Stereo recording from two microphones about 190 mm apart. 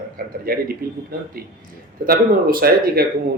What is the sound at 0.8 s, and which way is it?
Speech, 55° right (ahead or behind).